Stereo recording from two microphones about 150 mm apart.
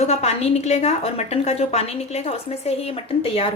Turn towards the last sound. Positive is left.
turn(degrees=40)  # may be behind; listen again after turning